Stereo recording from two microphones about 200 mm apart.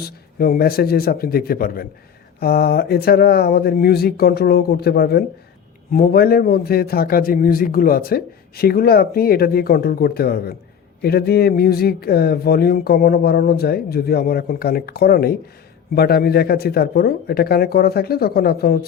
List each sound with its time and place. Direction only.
0.3 s a man's voice: 45° left (ahead or behind)